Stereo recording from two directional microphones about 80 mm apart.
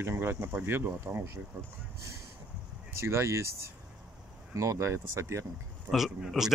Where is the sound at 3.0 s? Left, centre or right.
Right.